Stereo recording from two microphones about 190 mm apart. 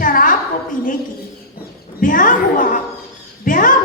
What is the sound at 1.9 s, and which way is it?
A woman's voice, 45° left (ahead or behind).